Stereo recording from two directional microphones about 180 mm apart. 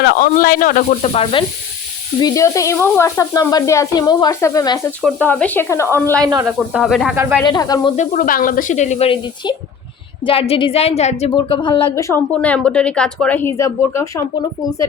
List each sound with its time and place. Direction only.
0.0 s speech: 55° left (ahead or behind); by 1.5 s 30° left (ahead or behind)
2.2 s speech: 15° left (ahead or behind)
5.0 s speech: 10° left (ahead or behind)
6.2 s speech: 20° right (ahead or behind)
6.7 s speech: centre (ahead or behind)
7.4 s speech: 20° left (ahead or behind)
7.9 s a woman's voice: 50° left (ahead or behind); by 12.2 s 15° left (ahead or behind)
12.3 s speech: 5° left (ahead or behind)